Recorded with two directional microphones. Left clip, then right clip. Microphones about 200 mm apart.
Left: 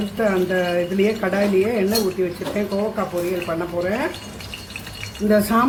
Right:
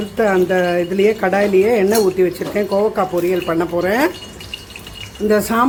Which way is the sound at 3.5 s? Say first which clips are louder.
Right 6 dB; 45° right (ahead or behind).